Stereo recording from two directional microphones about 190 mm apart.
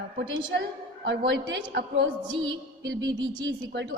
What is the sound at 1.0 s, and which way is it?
A woman's voice, 70° right (ahead or behind).